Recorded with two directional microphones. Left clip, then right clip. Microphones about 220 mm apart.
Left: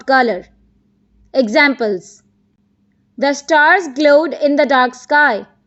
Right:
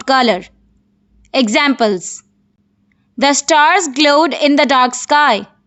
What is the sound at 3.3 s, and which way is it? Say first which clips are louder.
Speech: left 1 dB; 35° right (ahead or behind).